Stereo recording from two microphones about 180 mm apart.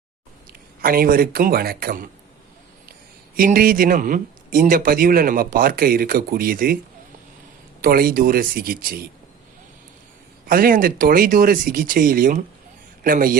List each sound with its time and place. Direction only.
0.8 s a man's voice: 55° right (ahead or behind)
3.3 s a man's voice: 50° right (ahead or behind)
7.8 s a man's voice: 55° right (ahead or behind)
10.4 s a man's voice: 55° right (ahead or behind)